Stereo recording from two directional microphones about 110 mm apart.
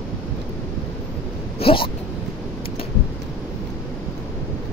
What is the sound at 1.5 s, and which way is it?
Speech, 55° left (ahead or behind).